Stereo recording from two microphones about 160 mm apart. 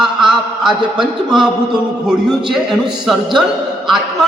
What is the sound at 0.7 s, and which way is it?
Speech, 30° right (ahead or behind).